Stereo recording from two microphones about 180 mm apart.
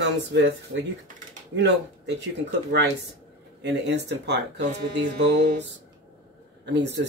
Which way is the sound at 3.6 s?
75° right (ahead or behind).